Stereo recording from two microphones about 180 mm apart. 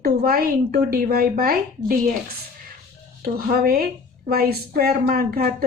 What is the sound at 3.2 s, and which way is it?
Speech, 55° right (ahead or behind).